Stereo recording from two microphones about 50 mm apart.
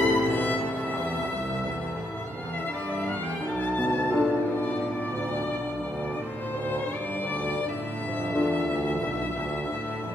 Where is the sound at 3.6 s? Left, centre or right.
Left.